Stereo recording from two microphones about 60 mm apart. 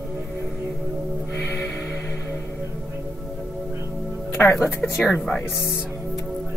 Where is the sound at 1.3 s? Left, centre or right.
Left.